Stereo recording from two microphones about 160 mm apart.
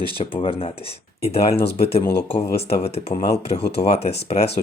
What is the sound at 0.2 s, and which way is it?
Speech, 35° left (ahead or behind).